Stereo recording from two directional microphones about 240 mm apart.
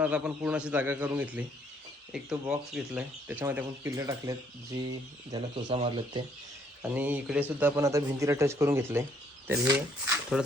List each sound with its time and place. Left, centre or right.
0.0 s speech: centre; by 6.2 s right
6.8 s speech: centre